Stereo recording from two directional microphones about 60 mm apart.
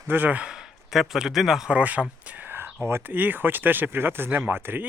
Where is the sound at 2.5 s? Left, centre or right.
Right.